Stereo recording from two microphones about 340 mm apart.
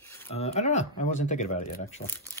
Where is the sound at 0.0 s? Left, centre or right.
Centre.